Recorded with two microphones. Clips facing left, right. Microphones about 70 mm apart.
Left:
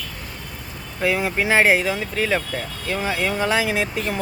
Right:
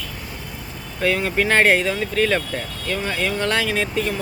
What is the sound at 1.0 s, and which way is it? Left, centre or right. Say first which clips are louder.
Speech: right 1 dB; centre.